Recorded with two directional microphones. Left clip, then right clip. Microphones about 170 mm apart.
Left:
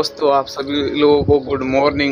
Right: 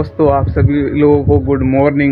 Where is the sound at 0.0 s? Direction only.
20° left (ahead or behind).